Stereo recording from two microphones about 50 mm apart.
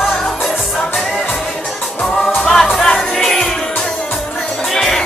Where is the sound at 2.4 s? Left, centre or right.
Centre.